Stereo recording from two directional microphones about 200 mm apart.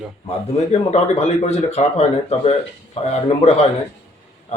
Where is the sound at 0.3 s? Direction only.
35° left (ahead or behind).